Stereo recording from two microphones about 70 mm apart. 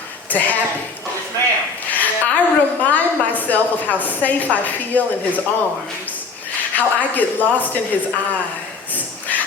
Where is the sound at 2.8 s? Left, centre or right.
Left.